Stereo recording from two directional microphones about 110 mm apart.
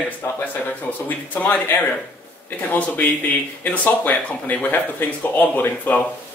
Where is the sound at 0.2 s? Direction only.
15° left (ahead or behind).